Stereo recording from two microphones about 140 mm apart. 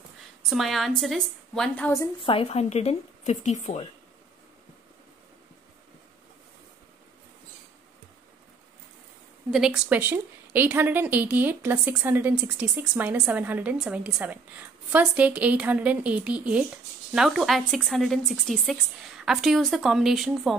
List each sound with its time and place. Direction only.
0.5 s a woman's voice: centre (ahead or behind)
2.2 s speech: 45° left (ahead or behind)
9.5 s a woman's voice: 5° right (ahead or behind)